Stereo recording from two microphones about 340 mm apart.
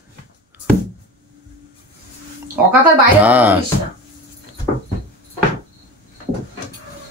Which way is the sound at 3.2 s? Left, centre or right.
Centre.